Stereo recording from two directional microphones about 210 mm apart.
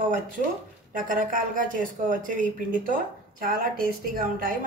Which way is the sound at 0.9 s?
40° right (ahead or behind).